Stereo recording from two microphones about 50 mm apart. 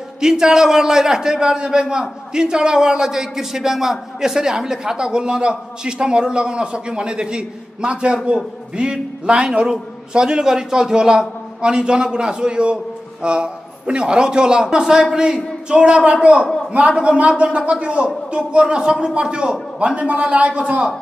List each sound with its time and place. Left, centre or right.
0.2 s a man's voice: centre